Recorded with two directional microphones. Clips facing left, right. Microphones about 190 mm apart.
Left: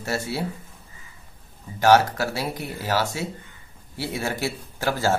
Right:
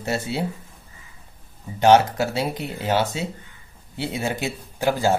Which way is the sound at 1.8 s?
20° right (ahead or behind).